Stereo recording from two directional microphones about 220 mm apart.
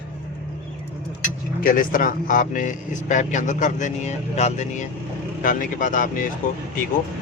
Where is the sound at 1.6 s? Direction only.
40° left (ahead or behind).